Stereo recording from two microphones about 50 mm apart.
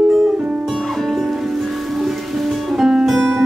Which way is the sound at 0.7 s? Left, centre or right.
Centre.